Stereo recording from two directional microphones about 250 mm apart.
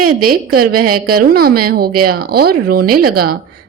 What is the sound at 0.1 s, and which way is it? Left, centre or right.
A woman's voice, right.